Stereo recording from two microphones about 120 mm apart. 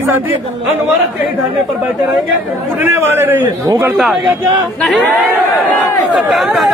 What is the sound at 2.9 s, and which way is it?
Speech, 20° right (ahead or behind).